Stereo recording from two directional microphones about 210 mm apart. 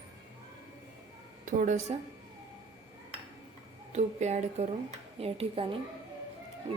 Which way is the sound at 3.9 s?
30° right (ahead or behind).